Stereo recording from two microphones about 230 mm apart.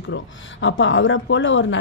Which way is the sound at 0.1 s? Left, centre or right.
Left.